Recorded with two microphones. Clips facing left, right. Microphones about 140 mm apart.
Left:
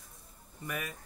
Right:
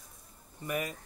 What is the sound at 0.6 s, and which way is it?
Speech, 20° right (ahead or behind).